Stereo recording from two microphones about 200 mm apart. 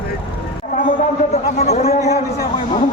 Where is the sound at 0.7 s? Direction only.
40° left (ahead or behind).